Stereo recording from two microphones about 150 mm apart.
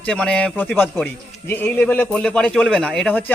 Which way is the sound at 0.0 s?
5° left (ahead or behind).